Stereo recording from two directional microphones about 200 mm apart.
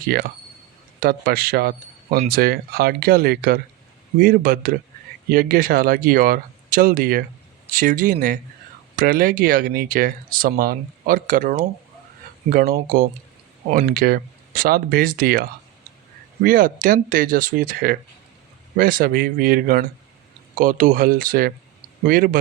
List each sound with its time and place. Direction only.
0.1 s speech: 50° right (ahead or behind)